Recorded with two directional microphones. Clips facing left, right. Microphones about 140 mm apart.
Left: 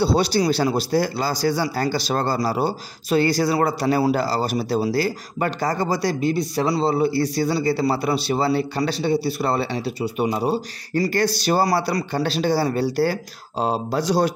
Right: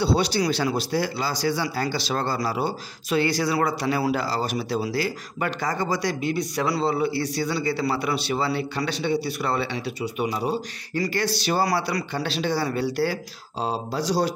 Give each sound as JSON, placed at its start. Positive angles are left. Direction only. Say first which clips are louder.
{"t": 0.0, "sound": "a man's voice", "louder": "left 3 dB", "side_deg": 40}
{"t": 13.6, "sound": "speech", "louder": "left 4 dB", "side_deg": 55}